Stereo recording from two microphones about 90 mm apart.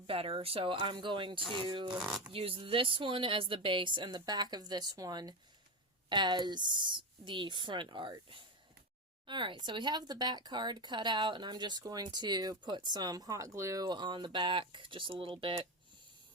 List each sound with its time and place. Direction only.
0.1 s a woman's voice: 90° right; by 2.0 s 60° right (ahead or behind)
2.3 s a woman's voice: 85° right; by 13.8 s 35° right (ahead or behind)
13.8 s speech: 55° right (ahead or behind); by 15.6 s 70° right (ahead or behind)